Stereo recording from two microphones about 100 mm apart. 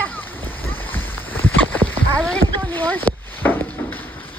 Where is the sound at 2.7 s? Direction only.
20° left (ahead or behind).